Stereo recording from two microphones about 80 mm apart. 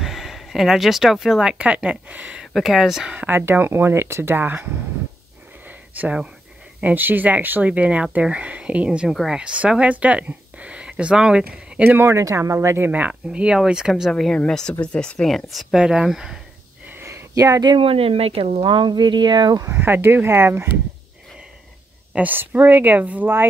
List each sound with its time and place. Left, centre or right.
0.0 s speech: centre
2.4 s speech: centre
3.2 s speech: right
5.7 s a sound: right
6.8 s speech: right
9.1 s speech: centre
9.4 s speech: centre
11.8 s speech: right
12.1 s speech: right; by 14.1 s centre
14.1 s speech: centre
17.0 s a sound: right
18.6 s speech: right
19.7 s speech: right
22.1 s speech: right